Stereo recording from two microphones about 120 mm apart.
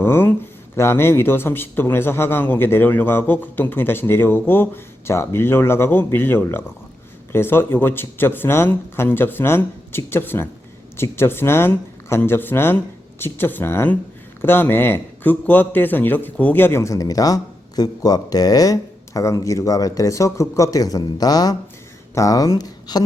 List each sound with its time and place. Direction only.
0.0 s a man's voice: 15° left (ahead or behind); by 23.0 s 35° left (ahead or behind)